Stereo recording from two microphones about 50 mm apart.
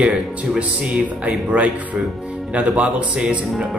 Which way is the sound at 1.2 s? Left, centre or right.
Right.